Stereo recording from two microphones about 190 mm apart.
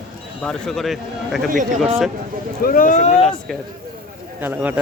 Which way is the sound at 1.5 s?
40° right (ahead or behind).